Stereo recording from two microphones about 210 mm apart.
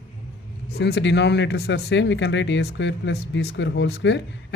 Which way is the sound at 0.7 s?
50° left (ahead or behind).